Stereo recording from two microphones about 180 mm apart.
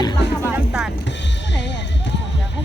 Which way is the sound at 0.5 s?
5° right (ahead or behind).